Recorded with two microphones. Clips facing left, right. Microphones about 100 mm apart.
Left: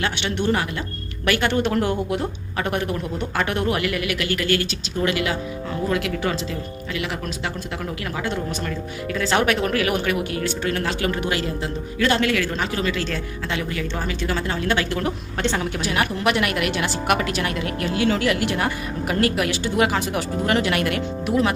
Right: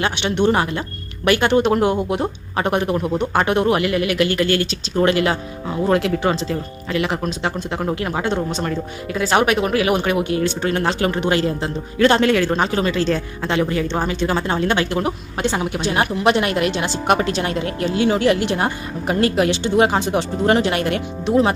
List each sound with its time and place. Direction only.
0.0 s a woman's voice: 20° right (ahead or behind)
9.1 s a woman's voice: 15° right (ahead or behind)
15.8 s a woman's voice: 25° right (ahead or behind)